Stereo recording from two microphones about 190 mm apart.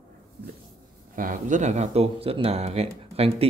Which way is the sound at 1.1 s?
45° right (ahead or behind).